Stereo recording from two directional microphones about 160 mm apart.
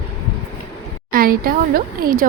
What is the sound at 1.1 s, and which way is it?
Speech, 65° right (ahead or behind).